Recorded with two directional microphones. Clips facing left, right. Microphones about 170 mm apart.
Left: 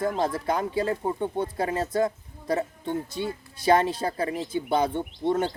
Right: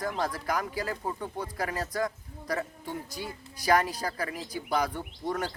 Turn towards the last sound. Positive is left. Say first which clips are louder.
# left 7 dB
turn(degrees=25)  # may be behind; listen again after turning